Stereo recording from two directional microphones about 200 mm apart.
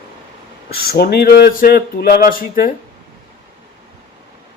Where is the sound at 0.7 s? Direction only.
50° left (ahead or behind).